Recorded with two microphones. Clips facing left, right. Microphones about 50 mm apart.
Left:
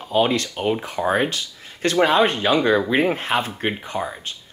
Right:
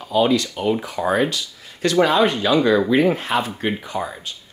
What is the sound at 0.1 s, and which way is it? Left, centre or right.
Speech, left.